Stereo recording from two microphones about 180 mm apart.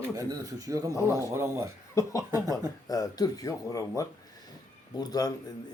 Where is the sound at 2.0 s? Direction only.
15° left (ahead or behind).